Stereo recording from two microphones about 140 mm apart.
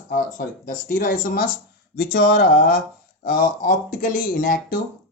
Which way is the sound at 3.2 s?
75° left (ahead or behind).